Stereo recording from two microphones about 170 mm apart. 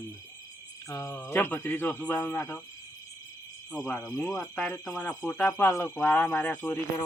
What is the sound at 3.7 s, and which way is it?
Speech, 5° left (ahead or behind).